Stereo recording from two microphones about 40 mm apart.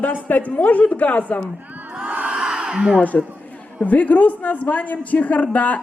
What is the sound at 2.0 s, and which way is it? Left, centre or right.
Crowd, right.